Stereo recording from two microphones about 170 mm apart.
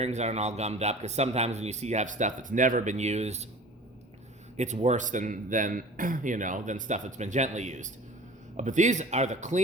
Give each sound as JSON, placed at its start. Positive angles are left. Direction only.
{"t": 0.0, "sound": "speech", "side_deg": -40}
{"t": 4.5, "sound": "speech", "side_deg": -45}